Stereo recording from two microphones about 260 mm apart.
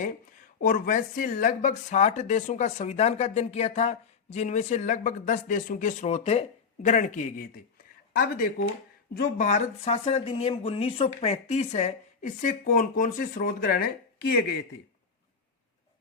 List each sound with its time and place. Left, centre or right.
0.6 s speech: left